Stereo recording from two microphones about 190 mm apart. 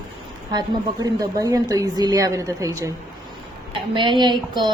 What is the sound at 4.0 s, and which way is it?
Speech, 25° right (ahead or behind).